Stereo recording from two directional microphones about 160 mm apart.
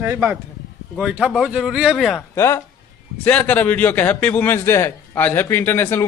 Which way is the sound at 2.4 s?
15° left (ahead or behind).